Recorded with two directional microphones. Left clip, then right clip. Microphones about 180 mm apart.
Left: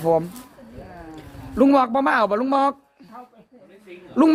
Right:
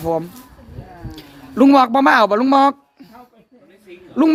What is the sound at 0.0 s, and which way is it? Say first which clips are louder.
Speech: left 1 dB; centre (ahead or behind).